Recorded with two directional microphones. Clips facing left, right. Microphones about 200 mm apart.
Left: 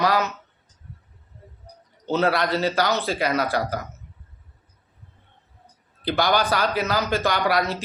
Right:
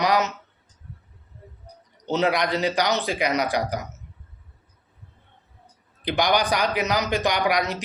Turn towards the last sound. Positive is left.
turn(degrees=-15)  # may be behind; listen again after turning